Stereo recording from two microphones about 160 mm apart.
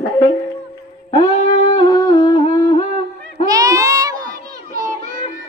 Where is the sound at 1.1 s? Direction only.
30° left (ahead or behind).